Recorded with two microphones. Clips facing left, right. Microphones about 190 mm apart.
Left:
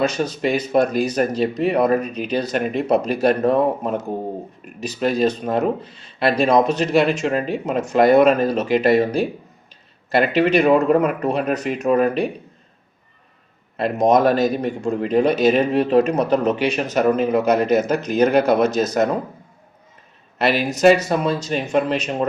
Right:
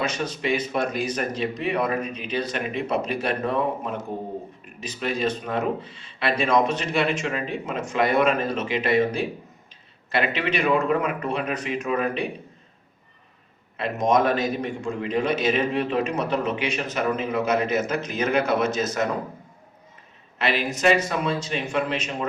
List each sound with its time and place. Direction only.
0.0 s speech: 35° left (ahead or behind)
13.7 s speech: 40° left (ahead or behind)
20.6 s speech: 40° left (ahead or behind)